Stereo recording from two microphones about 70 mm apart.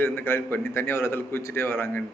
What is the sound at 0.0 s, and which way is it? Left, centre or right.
A man's voice, left.